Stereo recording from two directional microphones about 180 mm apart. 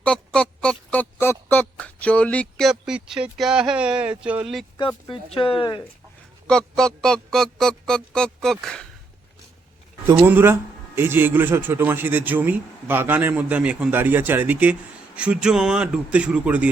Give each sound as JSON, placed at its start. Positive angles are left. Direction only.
{"t": 0.0, "sound": "a sound", "side_deg": 5}
{"t": 5.0, "sound": "speech", "side_deg": 30}
{"t": 6.5, "sound": "music", "side_deg": 5}
{"t": 10.1, "sound": "a man's voice", "side_deg": -10}